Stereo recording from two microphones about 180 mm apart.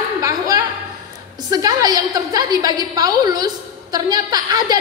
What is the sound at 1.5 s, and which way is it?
A woman's voice, 20° right (ahead or behind).